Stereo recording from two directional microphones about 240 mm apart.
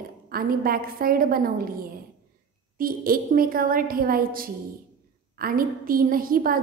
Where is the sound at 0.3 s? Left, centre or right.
Right.